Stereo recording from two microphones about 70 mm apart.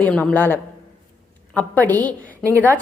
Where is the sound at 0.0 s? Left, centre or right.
Centre.